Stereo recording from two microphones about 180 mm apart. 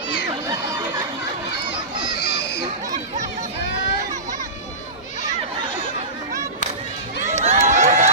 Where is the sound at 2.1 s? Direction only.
65° left (ahead or behind).